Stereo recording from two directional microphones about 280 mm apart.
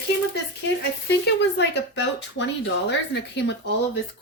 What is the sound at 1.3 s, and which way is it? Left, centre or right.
Speech, left.